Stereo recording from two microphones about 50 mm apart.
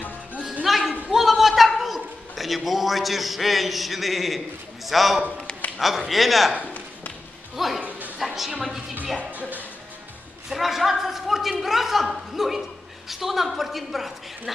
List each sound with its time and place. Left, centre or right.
0.7 s a sound: centre
1.1 s a man's voice: centre
7.5 s a woman's voice: centre
10.5 s a woman's voice: centre